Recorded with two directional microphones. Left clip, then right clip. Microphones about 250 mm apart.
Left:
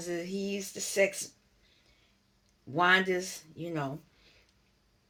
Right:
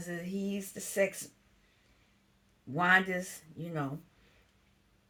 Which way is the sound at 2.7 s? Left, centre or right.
Centre.